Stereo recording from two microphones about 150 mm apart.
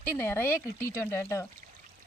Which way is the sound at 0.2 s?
15° left (ahead or behind).